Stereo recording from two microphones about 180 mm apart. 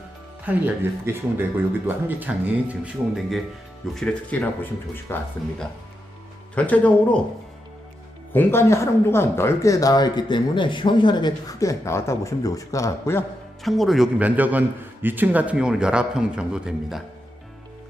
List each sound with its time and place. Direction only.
0.4 s speech: 10° right (ahead or behind); by 7.2 s 10° left (ahead or behind)
8.3 s speech: 10° left (ahead or behind)
13.6 s a man's voice: centre (ahead or behind)